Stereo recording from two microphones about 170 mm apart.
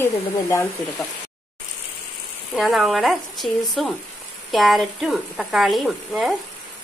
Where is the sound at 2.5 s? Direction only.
Centre (ahead or behind).